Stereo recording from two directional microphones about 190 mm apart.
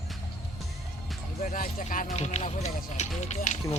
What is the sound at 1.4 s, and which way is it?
Speech, 45° left (ahead or behind).